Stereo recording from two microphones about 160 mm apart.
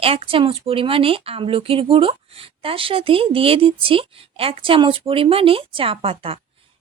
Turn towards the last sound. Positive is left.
turn(degrees=-35)  # may be behind; listen again after turning